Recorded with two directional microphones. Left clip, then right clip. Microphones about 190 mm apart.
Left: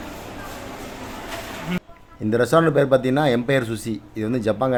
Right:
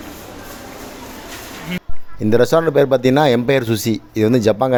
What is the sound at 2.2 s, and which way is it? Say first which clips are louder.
Speech: right 4 dB; 40° right (ahead or behind).